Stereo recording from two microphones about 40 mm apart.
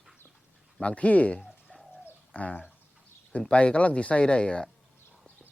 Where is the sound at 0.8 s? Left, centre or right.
Left.